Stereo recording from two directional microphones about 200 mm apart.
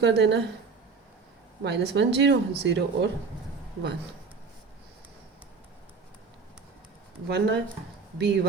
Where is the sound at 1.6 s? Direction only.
60° right (ahead or behind).